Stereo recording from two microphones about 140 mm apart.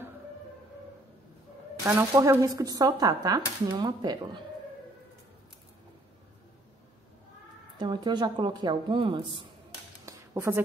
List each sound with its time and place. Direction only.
1.9 s speech: 20° right (ahead or behind)
7.7 s speech: 35° right (ahead or behind)
10.0 s a sound: 20° right (ahead or behind)